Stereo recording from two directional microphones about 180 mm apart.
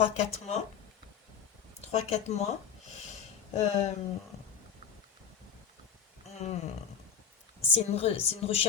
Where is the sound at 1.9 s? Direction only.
35° left (ahead or behind).